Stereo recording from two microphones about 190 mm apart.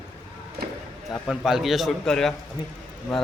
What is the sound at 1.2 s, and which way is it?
A man's voice, centre (ahead or behind).